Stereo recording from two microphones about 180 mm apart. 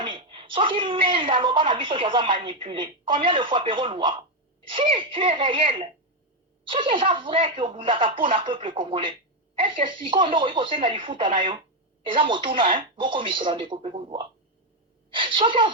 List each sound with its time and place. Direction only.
0.0 s a woman's voice: 30° right (ahead or behind)